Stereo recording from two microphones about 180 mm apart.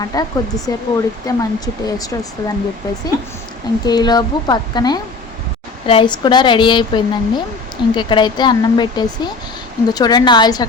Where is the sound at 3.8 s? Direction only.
20° left (ahead or behind).